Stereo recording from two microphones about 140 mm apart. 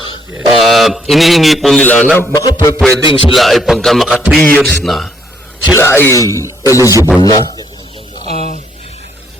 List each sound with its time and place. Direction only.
0.3 s a man's voice: centre (ahead or behind)
1.8 s a man's voice: 10° left (ahead or behind)
2.3 s speech: 25° left (ahead or behind)
3.1 s music: 40° left (ahead or behind)
3.3 s a man's voice: centre (ahead or behind)
5.7 s speech: 20° left (ahead or behind)
7.2 s music: 30° left (ahead or behind)
8.2 s a sound: 50° right (ahead or behind)